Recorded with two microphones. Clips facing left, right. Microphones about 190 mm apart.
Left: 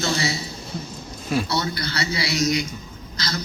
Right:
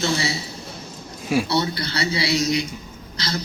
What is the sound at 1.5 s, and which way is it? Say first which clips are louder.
A man's voice: right 3 dB; 30° right (ahead or behind).